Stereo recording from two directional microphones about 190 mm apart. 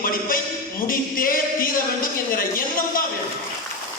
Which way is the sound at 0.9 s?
50° left (ahead or behind).